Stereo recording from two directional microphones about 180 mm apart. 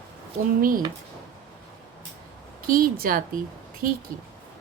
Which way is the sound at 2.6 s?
50° right (ahead or behind).